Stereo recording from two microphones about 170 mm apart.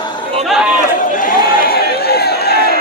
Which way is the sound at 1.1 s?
55° left (ahead or behind).